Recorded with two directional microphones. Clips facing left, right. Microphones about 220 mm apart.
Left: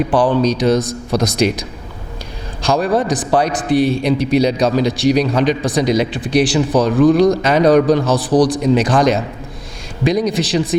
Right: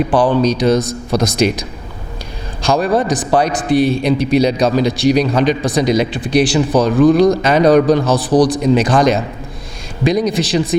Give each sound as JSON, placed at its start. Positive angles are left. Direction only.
{"t": 0.0, "sound": "a man's voice", "side_deg": -15}
{"t": 2.6, "sound": "a man's voice", "side_deg": -10}